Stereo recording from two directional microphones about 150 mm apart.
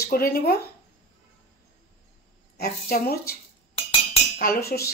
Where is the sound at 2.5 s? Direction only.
90° left.